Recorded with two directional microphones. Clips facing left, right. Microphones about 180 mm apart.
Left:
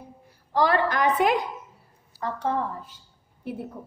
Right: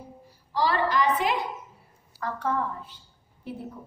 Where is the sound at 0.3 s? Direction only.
55° left (ahead or behind).